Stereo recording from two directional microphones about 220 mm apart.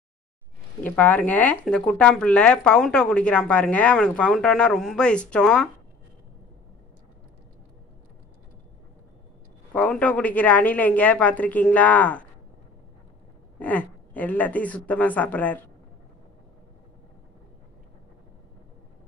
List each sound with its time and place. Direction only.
0.8 s speech: 5° left (ahead or behind)
9.7 s speech: 5° left (ahead or behind)
13.6 s speech: 5° left (ahead or behind)